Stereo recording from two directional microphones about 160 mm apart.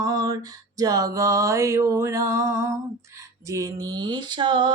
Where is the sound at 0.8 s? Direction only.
25° right (ahead or behind).